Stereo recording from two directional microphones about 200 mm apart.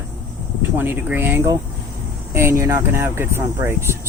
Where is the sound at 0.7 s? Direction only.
10° right (ahead or behind).